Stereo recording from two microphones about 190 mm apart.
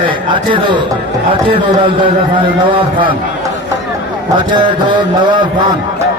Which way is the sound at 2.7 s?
25° right (ahead or behind).